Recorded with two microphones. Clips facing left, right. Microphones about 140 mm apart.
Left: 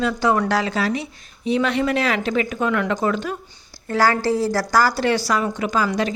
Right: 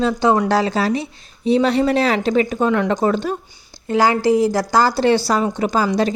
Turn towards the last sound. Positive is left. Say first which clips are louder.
# right 3 dB
turn(degrees=-35)  # may be behind; listen again after turning